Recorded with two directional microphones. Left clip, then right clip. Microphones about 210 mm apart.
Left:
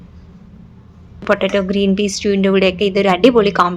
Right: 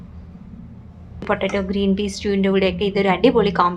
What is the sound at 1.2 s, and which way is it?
A woman's voice, 20° left (ahead or behind).